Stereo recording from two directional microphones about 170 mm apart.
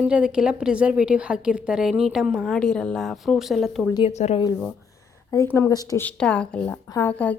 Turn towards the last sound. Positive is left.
turn(degrees=10)  # may be behind; listen again after turning